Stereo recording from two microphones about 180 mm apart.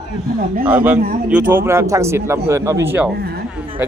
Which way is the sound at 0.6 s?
10° right (ahead or behind).